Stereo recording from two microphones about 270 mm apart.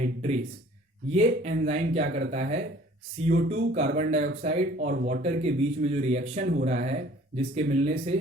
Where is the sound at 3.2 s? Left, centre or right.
Right.